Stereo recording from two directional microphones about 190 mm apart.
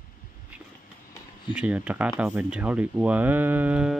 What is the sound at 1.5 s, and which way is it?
Speech, 5° right (ahead or behind).